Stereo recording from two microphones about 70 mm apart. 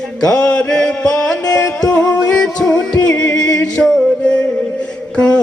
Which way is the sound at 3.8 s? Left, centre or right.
Centre.